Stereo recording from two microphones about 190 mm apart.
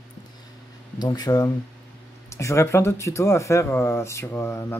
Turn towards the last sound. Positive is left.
turn(degrees=15)  # may be behind; listen again after turning